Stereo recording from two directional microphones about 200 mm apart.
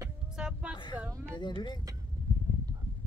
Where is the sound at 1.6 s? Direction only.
20° left (ahead or behind).